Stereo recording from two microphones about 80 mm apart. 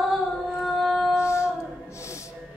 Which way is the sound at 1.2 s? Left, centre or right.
Left.